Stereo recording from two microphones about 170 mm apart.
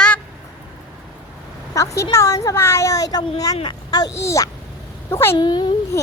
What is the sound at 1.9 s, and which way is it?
A child's voice, 15° left (ahead or behind).